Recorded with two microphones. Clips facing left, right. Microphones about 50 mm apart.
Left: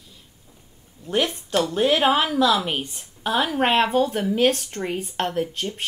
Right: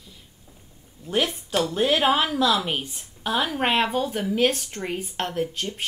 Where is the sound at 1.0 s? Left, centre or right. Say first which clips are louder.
Left 1 dB; centre.